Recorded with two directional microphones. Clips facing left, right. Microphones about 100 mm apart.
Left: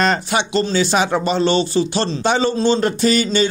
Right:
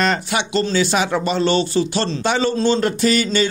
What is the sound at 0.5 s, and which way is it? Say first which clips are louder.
Speech: even; 25° left (ahead or behind).